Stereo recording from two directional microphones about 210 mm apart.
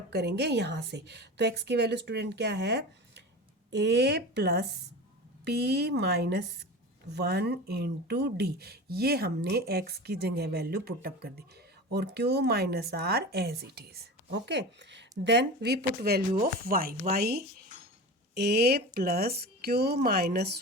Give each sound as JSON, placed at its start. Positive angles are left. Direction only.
{"t": 0.1, "sound": "speech", "side_deg": -50}